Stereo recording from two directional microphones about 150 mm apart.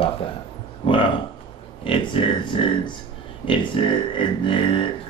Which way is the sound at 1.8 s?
35° left (ahead or behind).